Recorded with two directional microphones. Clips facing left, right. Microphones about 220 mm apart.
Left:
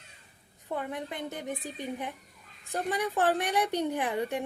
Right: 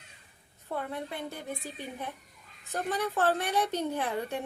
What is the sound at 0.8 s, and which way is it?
A woman's voice, 15° left (ahead or behind).